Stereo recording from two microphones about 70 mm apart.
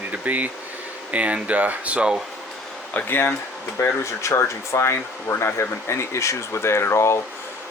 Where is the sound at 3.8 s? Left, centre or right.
Left.